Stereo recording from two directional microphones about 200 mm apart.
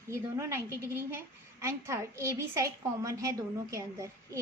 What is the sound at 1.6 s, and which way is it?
A woman's voice, 15° right (ahead or behind).